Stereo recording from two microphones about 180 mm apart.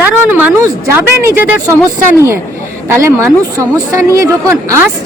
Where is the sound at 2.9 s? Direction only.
15° right (ahead or behind).